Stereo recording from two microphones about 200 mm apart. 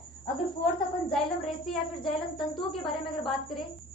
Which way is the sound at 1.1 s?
Centre (ahead or behind).